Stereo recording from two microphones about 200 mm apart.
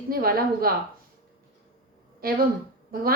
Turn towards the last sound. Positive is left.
turn(degrees=-45)  # may be behind; listen again after turning